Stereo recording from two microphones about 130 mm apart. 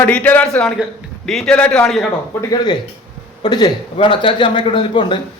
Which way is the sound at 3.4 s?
35° left (ahead or behind).